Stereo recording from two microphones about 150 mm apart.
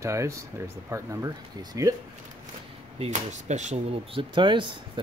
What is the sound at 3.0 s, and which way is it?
Speech, 50° right (ahead or behind).